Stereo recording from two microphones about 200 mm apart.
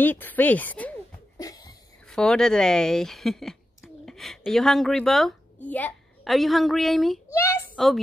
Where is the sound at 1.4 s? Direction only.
20° left (ahead or behind).